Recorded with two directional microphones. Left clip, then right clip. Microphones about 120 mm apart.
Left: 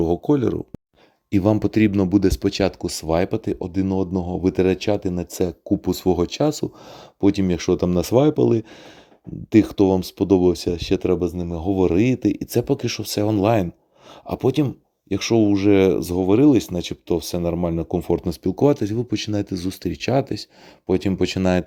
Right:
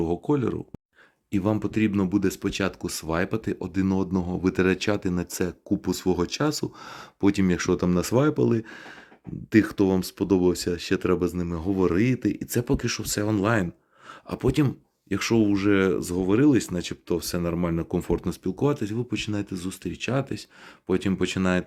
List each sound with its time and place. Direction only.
0.0 s speech: 30° left (ahead or behind)
1.3 s speech: 50° left (ahead or behind); by 18.3 s 20° left (ahead or behind)
18.3 s speech: 45° left (ahead or behind)